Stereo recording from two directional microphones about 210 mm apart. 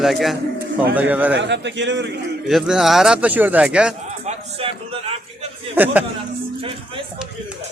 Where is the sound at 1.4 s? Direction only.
55° right (ahead or behind).